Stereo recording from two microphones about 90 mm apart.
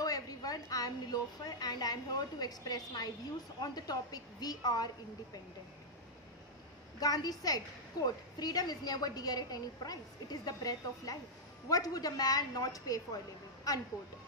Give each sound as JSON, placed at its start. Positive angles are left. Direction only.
{"t": 0.0, "sound": "a woman's voice", "side_deg": 45}
{"t": 7.0, "sound": "a woman's voice", "side_deg": 45}